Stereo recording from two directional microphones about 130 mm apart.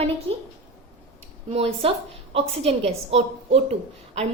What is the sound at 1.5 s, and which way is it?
A woman's voice, 50° right (ahead or behind).